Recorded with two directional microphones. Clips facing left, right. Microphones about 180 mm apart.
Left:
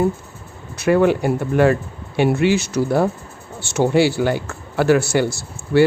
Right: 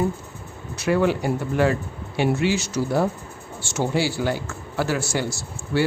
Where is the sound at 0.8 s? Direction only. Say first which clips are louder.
Left 5 dB; 55° left (ahead or behind).